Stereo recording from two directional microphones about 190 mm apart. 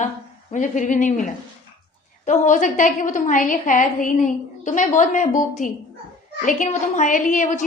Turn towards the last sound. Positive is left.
turn(degrees=40)  # may be behind; listen again after turning